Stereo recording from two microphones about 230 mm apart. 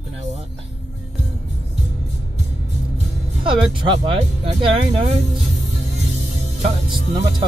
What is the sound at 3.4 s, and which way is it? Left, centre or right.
Speech, right.